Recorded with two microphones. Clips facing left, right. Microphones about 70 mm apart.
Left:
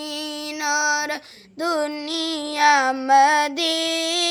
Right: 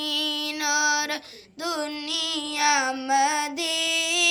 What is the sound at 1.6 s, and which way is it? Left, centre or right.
Child singing, left.